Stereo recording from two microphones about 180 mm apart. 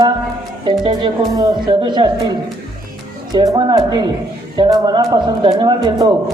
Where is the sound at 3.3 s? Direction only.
20° right (ahead or behind).